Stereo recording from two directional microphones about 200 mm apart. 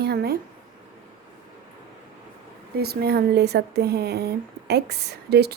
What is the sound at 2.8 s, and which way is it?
Speech, 50° right (ahead or behind).